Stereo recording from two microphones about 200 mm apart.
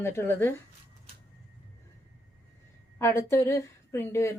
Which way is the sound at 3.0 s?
15° left (ahead or behind).